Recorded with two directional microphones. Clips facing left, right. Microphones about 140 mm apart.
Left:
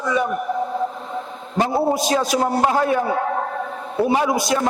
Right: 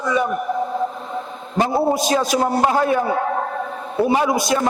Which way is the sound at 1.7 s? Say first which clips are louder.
Right 1 dB; 30° right (ahead or behind).